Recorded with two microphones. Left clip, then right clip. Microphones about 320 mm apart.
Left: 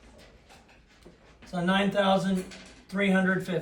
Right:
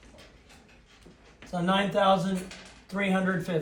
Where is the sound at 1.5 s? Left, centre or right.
Centre.